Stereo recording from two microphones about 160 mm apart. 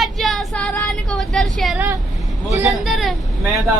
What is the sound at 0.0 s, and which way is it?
Child singing, centre (ahead or behind).